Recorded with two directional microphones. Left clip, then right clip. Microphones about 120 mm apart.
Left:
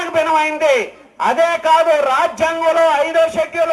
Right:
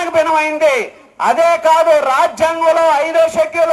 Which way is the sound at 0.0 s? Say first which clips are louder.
Right 2 dB; 50° right (ahead or behind).